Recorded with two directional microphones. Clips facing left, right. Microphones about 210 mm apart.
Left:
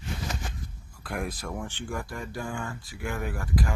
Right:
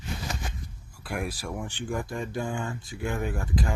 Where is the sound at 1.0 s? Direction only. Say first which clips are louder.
Right 1 dB; 5° right (ahead or behind).